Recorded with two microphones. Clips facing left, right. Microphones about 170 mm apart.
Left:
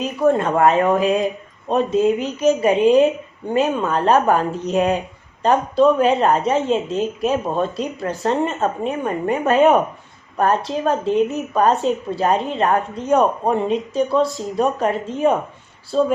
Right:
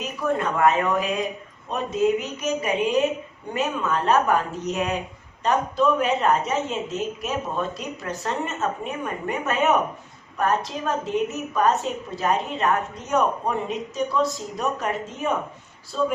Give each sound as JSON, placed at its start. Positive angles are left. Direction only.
{"t": 0.3, "sound": "a woman's voice", "side_deg": 30}